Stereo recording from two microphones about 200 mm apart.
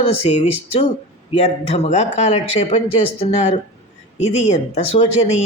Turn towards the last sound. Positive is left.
turn(degrees=35)  # may be behind; listen again after turning